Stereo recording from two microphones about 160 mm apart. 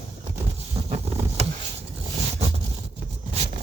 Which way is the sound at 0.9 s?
40° right (ahead or behind).